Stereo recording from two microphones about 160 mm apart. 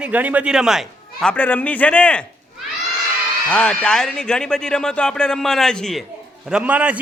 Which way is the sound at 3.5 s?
5° left (ahead or behind).